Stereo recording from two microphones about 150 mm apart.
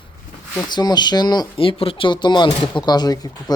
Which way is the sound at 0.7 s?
30° left (ahead or behind).